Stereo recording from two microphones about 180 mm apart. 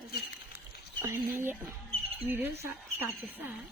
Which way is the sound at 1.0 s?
15° right (ahead or behind).